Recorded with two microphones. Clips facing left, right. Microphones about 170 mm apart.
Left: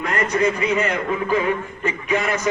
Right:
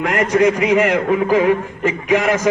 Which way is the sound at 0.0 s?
90° right.